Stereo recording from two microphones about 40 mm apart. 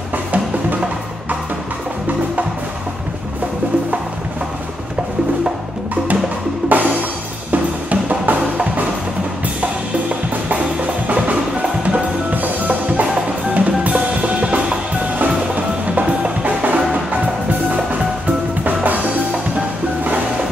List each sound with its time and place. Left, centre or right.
6.7 s music: right
7.5 s drum: right
11.1 s music: right
18.6 s drum kit: right